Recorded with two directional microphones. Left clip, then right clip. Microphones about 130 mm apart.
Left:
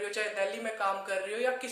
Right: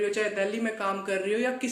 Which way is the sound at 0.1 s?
35° left (ahead or behind).